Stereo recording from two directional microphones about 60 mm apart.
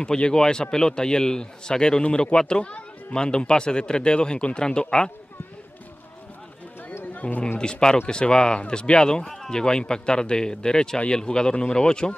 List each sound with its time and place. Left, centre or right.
0.0 s speech: centre
7.2 s speech: left